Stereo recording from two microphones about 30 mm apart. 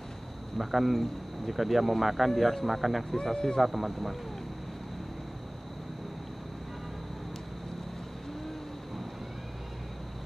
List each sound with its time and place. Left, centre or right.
0.6 s speech: centre
3.3 s speech: left
3.6 s speech: centre